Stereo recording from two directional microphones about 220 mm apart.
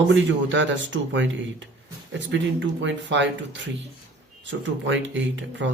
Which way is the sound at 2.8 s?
55° right (ahead or behind).